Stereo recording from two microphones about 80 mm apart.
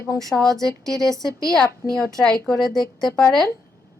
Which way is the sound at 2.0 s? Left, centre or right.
Centre.